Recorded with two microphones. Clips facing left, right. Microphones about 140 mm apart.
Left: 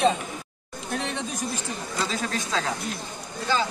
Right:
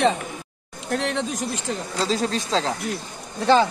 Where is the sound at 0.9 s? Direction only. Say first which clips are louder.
Right 6 dB; 80° right.